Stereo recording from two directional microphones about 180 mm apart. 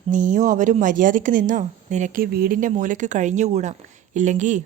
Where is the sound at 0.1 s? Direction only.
45° right (ahead or behind).